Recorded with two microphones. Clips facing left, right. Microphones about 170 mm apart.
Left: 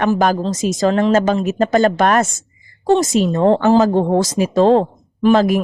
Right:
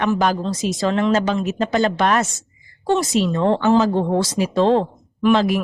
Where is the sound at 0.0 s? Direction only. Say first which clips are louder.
Left 3 dB; 45° left (ahead or behind).